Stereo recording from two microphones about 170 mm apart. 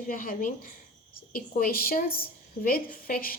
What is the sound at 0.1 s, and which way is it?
Speech, 55° left (ahead or behind).